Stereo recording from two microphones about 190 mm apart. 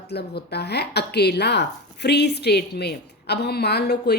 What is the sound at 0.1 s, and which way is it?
Speech, 60° left (ahead or behind).